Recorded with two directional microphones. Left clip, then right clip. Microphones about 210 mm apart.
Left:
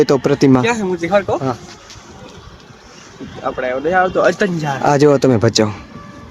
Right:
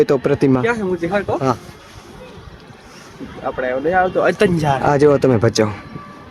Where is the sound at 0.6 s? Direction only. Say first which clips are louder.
Left 1 dB; 50° left (ahead or behind).